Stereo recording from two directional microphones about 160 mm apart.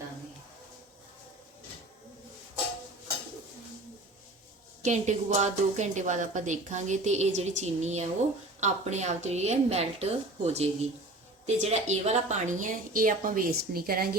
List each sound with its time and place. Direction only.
4.8 s a woman's voice: 50° right (ahead or behind); by 14.2 s 70° right (ahead or behind)